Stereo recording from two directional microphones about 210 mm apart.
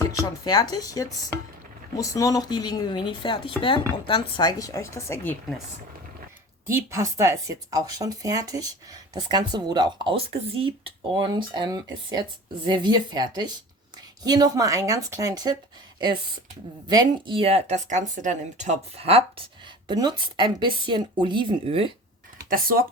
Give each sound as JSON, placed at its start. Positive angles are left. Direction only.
{"t": 0.0, "sound": "speech", "side_deg": 15}
{"t": 6.7, "sound": "speech", "side_deg": -15}
{"t": 16.9, "sound": "speech", "side_deg": -20}
{"t": 22.4, "sound": "speech", "side_deg": -45}